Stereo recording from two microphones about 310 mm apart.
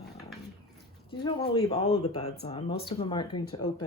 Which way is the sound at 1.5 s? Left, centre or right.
Centre.